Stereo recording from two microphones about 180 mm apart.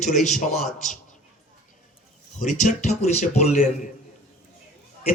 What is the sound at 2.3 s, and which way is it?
Speech, 45° left (ahead or behind).